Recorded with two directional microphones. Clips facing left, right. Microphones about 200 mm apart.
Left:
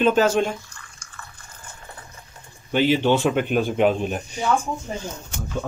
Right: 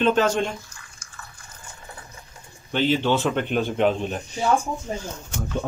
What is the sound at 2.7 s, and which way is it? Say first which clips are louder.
Speech: left 3 dB; 15° left (ahead or behind).